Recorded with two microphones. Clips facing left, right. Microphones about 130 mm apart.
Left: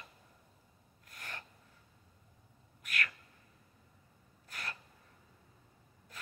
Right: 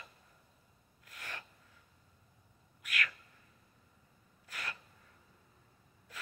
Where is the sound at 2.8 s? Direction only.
40° left (ahead or behind).